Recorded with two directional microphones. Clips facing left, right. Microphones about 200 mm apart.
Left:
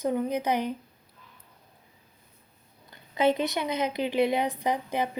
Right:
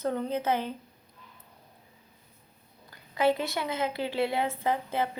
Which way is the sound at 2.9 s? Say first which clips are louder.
Left 1 dB; 20° left (ahead or behind).